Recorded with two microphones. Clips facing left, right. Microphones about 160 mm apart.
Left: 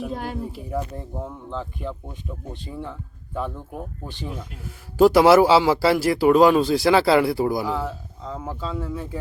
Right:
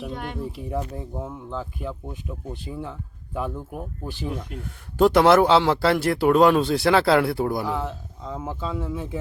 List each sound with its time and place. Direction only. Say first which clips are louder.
0.1 s a sound: left 3 dB; 35° left (ahead or behind)
0.3 s speech: left 1 dB; centre (ahead or behind)
4.4 s speech: right 2 dB; 5° left (ahead or behind); by 9.0 s 15° right (ahead or behind)